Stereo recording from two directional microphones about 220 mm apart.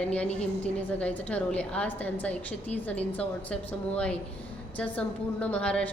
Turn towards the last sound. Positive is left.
turn(degrees=5)  # may be behind; listen again after turning